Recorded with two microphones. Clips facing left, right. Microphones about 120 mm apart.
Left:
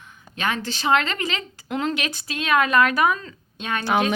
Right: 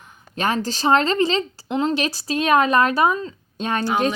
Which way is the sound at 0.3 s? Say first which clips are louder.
Right 4 dB; 40° right (ahead or behind).